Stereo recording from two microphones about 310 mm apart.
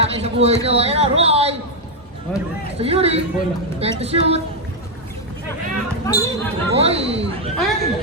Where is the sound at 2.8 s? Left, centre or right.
Centre.